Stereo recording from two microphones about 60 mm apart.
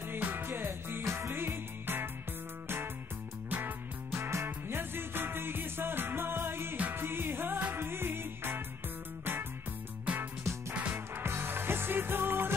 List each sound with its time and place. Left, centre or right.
0.1 s music: right
3.4 s music: right
4.1 s music: right
10.7 s music: right
11.2 s music: right